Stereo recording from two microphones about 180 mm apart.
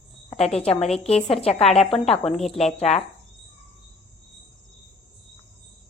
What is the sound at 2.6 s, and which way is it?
Speech, 35° left (ahead or behind).